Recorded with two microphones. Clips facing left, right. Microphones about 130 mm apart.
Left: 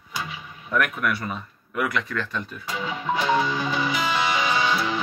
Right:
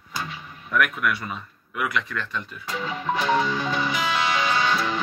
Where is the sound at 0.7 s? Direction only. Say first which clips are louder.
Even; 35° left (ahead or behind).